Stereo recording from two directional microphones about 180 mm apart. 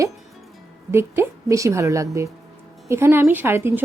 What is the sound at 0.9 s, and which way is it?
A woman's voice, 15° right (ahead or behind).